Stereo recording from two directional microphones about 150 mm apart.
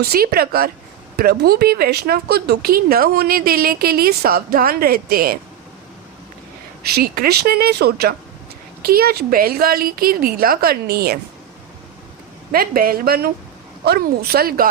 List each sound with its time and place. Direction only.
0.0 s speech: 90° right
6.8 s a woman's voice: 90° right
12.5 s a woman's voice: 85° right